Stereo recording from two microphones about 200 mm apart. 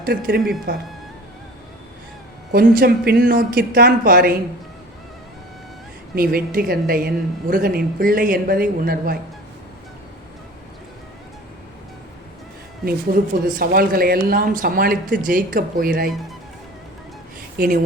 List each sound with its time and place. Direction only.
0.0 s speech: 50° right (ahead or behind)
2.5 s speech: 50° right (ahead or behind)
6.1 s speech: 45° right (ahead or behind)
12.8 s speech: 45° right (ahead or behind)
17.6 s speech: 45° right (ahead or behind)